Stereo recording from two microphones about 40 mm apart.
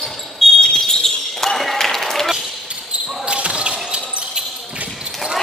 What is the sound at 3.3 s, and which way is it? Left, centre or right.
Basketball bounce, right.